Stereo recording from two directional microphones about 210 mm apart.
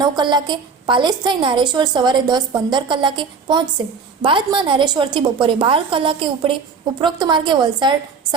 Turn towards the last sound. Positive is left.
turn(degrees=-20)  # may be behind; listen again after turning